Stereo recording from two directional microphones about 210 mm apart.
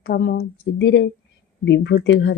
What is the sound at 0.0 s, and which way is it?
A woman's voice, 50° left (ahead or behind).